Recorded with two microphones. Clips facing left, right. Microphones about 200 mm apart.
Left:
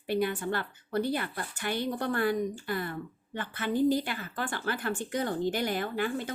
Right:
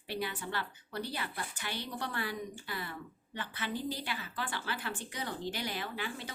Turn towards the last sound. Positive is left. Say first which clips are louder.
# left 9 dB
turn(degrees=50)  # may be behind; listen again after turning